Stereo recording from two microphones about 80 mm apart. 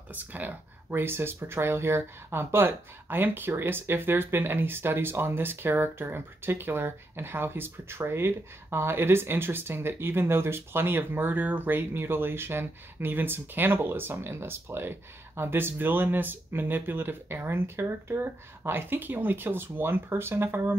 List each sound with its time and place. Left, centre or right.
0.1 s speech: right